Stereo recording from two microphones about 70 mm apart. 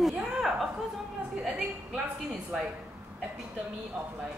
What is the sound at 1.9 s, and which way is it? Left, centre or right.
Speech, centre.